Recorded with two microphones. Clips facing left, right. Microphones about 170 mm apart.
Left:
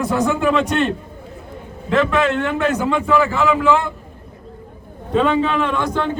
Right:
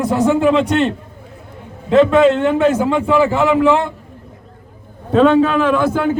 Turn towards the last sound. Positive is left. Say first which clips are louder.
# right 5 dB
turn(degrees=-5)  # may be behind; listen again after turning